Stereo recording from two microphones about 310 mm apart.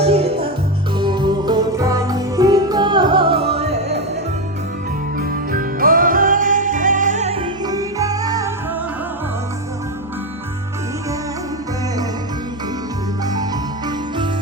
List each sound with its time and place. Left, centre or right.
0.0 s music: centre
5.1 s music: right; by 8.5 s centre